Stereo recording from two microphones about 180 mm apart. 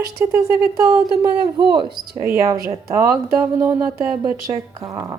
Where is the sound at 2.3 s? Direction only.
15° right (ahead or behind).